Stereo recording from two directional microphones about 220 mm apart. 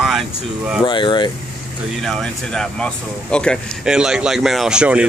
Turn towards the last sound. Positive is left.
turn(degrees=-5)  # may be behind; listen again after turning